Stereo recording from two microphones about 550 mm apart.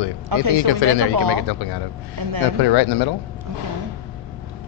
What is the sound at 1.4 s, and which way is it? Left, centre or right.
Speech, left.